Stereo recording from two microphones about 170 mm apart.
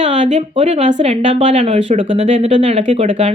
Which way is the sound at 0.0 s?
40° right (ahead or behind).